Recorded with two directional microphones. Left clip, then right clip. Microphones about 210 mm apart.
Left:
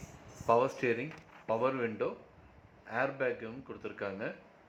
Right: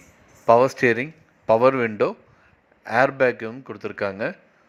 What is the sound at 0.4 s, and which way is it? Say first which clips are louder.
A man's voice: right 13 dB; 35° right (ahead or behind).